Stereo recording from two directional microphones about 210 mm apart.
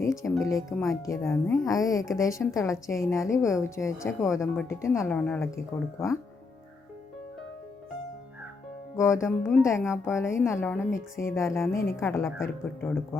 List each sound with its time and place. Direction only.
0.2 s a woman's voice: 15° left (ahead or behind)
0.5 s speech: centre (ahead or behind)
1.0 s a woman's voice: 15° left (ahead or behind)
9.0 s a woman's voice: 15° left (ahead or behind)